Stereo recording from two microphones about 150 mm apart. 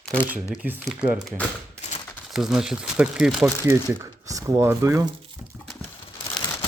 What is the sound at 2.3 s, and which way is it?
Speech, 5° right (ahead or behind).